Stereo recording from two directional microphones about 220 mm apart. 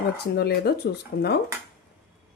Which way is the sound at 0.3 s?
45° left (ahead or behind).